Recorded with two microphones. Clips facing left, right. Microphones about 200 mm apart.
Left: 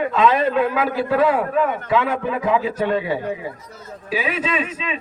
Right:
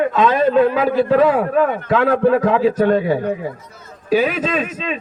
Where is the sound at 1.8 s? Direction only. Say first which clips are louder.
Right 6 dB; 45° right (ahead or behind).